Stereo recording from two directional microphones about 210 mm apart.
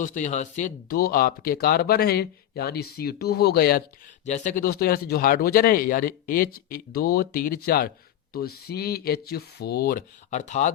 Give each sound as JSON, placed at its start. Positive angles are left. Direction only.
{"t": 0.0, "sound": "speech", "side_deg": 35}
{"t": 4.3, "sound": "speech", "side_deg": 35}